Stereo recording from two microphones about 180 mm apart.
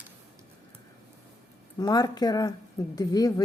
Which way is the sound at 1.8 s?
20° left (ahead or behind).